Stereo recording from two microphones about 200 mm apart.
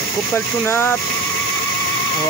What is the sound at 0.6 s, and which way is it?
Speech, 10° left (ahead or behind).